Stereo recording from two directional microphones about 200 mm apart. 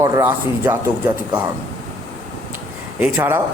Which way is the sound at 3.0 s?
10° right (ahead or behind).